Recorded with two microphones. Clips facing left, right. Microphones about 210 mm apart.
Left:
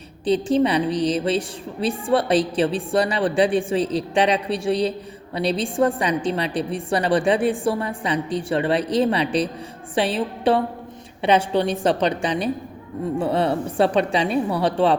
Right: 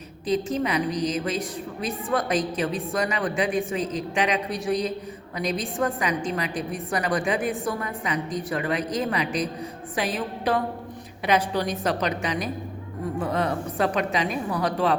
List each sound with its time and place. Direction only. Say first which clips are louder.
0.3 s a woman's voice: left 6 dB; 30° left (ahead or behind)